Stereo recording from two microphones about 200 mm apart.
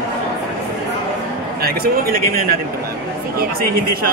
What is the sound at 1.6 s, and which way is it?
Speech, 50° right (ahead or behind).